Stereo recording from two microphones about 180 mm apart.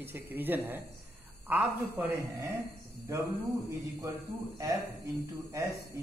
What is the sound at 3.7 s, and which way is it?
Speech, 20° right (ahead or behind).